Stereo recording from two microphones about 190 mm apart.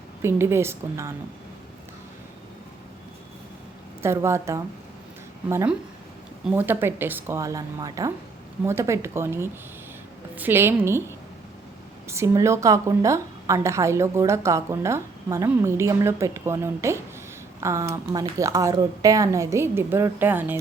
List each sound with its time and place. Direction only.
0.2 s a woman's voice: 15° right (ahead or behind)
4.0 s a woman's voice: 15° right (ahead or behind)
12.0 s a woman's voice: 15° right (ahead or behind)